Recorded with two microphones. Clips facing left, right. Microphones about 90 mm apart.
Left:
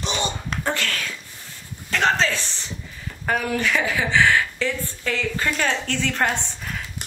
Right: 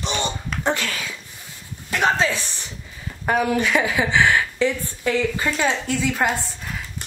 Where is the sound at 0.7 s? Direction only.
20° right (ahead or behind).